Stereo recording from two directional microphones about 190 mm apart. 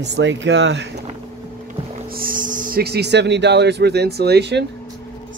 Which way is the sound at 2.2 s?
45° right (ahead or behind).